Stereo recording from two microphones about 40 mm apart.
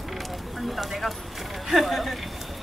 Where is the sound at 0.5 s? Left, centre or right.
Centre.